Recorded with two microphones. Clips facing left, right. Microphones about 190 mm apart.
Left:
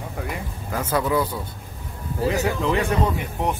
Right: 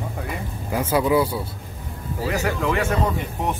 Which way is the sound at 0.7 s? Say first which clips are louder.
Right 3 dB; 10° right (ahead or behind).